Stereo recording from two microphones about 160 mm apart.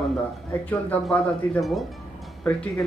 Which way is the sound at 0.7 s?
10° left (ahead or behind).